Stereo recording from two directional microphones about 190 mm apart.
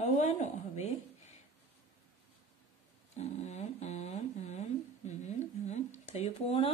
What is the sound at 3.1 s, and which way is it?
Speech, 35° left (ahead or behind).